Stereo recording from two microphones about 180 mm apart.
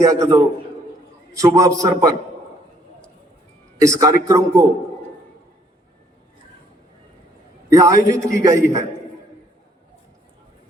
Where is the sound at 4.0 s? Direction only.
20° right (ahead or behind).